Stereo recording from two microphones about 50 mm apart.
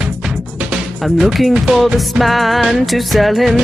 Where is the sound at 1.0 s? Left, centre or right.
Centre.